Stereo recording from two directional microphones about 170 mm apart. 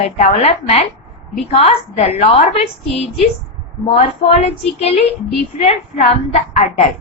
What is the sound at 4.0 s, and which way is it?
A woman's voice, 40° left (ahead or behind).